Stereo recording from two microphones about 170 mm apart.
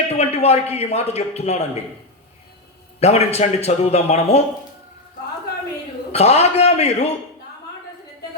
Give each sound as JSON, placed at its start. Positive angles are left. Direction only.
{"t": 0.1, "sound": "a man's voice", "side_deg": 40}
{"t": 3.0, "sound": "a man's voice", "side_deg": 40}
{"t": 6.1, "sound": "a man's voice", "side_deg": 40}